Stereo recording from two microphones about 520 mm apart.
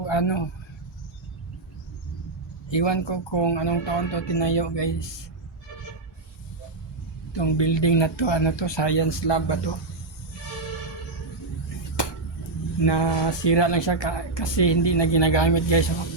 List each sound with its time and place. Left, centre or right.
0.0 s a man's voice: left
2.6 s speech: left
7.3 s speech: left
12.0 s a sound: left
12.8 s speech: left